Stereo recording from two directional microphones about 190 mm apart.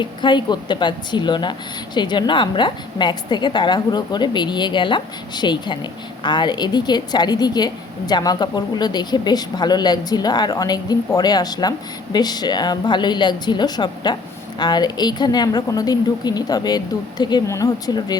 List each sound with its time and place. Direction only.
0.0 s a woman's voice: 25° left (ahead or behind)